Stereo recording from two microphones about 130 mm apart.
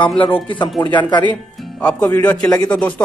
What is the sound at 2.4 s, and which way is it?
Speech, 25° left (ahead or behind).